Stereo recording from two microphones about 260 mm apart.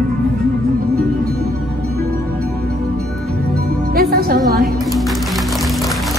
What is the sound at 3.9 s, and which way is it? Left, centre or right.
Music, right.